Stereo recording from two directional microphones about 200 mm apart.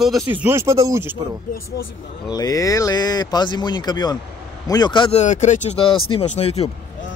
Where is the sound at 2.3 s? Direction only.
20° left (ahead or behind).